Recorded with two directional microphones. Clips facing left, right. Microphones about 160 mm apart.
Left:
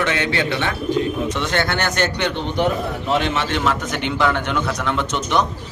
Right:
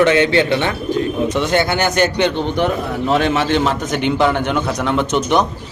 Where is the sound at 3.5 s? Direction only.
30° right (ahead or behind).